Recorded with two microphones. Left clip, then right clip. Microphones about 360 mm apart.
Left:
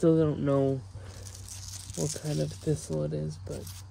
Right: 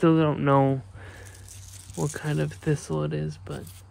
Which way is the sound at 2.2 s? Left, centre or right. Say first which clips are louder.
Right 4 dB; right.